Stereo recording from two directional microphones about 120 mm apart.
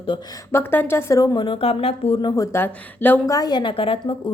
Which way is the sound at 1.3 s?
45° left (ahead or behind).